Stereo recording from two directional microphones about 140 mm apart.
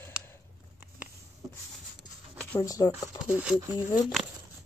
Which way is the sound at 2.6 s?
25° left (ahead or behind).